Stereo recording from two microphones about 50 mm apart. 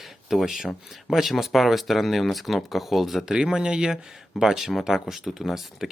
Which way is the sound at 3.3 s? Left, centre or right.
Centre.